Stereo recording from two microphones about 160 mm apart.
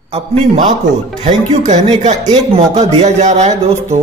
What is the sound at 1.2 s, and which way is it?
Speech, 45° right (ahead or behind).